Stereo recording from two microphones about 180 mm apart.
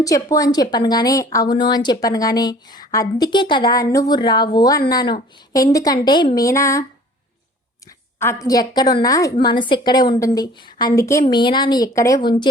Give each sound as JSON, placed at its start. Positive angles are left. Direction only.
{"t": 0.0, "sound": "a woman's voice", "side_deg": 20}
{"t": 7.9, "sound": "a woman's voice", "side_deg": 15}